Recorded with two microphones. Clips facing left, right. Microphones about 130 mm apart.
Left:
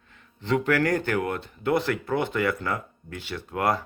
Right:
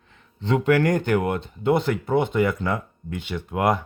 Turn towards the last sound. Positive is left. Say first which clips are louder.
# right 3 dB
turn(degrees=-20)  # may be behind; listen again after turning